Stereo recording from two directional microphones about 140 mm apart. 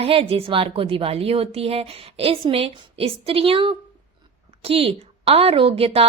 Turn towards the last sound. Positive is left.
turn(degrees=-40)  # may be behind; listen again after turning